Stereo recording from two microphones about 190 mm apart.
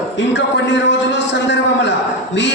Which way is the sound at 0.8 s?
70° left (ahead or behind).